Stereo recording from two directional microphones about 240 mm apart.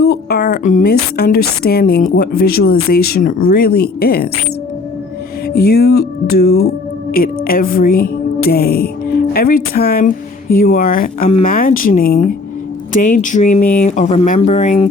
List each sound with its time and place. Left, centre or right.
0.0 s music: left
5.5 s music: left
8.4 s speech: left
10.5 s music: left